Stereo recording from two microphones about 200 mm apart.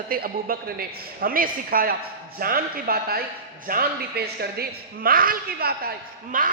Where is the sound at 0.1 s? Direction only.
50° right (ahead or behind).